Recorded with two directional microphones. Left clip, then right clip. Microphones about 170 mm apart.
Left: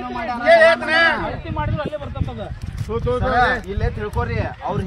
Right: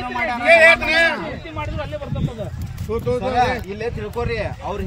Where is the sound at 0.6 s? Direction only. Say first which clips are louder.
Right 3 dB; 40° right (ahead or behind).